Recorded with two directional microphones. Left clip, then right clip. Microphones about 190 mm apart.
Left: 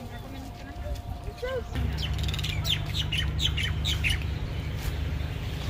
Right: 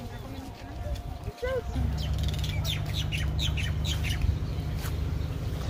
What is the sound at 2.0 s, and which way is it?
Squawk, 35° right (ahead or behind).